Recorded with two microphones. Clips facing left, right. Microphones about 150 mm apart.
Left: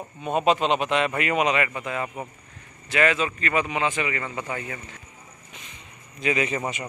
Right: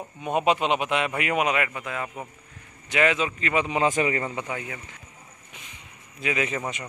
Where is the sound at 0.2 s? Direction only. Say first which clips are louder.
Left 1 dB; 10° right (ahead or behind).